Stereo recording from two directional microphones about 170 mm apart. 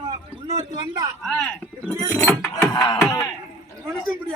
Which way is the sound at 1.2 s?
5° left (ahead or behind).